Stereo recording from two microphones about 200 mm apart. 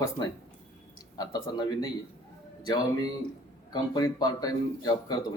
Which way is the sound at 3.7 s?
20° left (ahead or behind).